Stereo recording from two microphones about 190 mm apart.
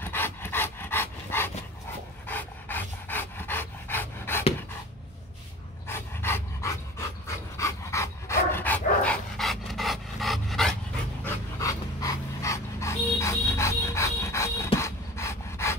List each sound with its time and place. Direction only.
0.0 s dog: 10° left (ahead or behind)
2.2 s pant: 10° left (ahead or behind)
5.9 s pant: 10° left (ahead or behind)
7.5 s dog: 15° left (ahead or behind)
11.6 s dog: 15° left (ahead or behind)
14.8 s pant: 15° left (ahead or behind)